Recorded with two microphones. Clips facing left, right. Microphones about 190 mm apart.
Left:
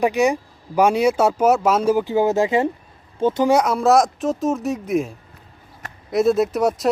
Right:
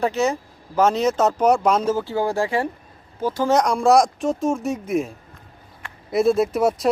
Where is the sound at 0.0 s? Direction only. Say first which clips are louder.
Left 3 dB; 15° left (ahead or behind).